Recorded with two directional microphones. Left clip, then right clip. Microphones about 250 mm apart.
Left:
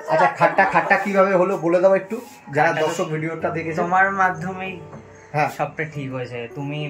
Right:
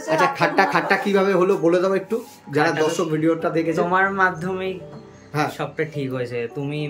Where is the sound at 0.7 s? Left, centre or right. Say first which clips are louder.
Left 2 dB; centre.